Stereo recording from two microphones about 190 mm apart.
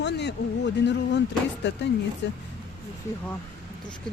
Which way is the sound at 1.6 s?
65° left (ahead or behind).